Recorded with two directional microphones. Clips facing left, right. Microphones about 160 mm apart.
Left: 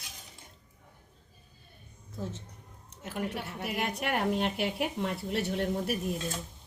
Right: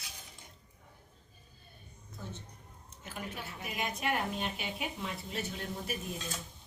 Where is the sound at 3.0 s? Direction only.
70° left (ahead or behind).